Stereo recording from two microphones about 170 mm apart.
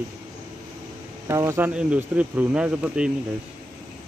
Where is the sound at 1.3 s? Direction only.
15° right (ahead or behind).